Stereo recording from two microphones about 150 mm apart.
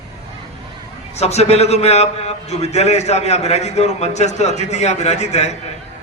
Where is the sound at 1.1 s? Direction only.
45° left (ahead or behind).